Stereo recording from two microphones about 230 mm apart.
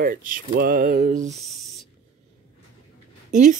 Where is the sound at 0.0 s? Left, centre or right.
Right.